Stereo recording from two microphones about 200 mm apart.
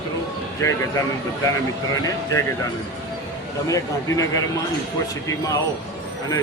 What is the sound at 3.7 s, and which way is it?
Speech, 15° left (ahead or behind).